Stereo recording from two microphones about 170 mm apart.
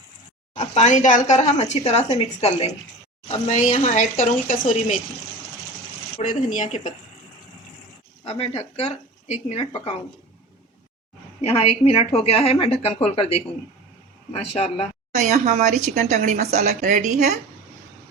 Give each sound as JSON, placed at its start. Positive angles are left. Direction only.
{"t": 0.5, "sound": "speech", "side_deg": 40}
{"t": 6.2, "sound": "speech", "side_deg": 45}
{"t": 8.2, "sound": "speech", "side_deg": 35}
{"t": 11.4, "sound": "speech", "side_deg": 35}
{"t": 15.1, "sound": "a woman's voice", "side_deg": -45}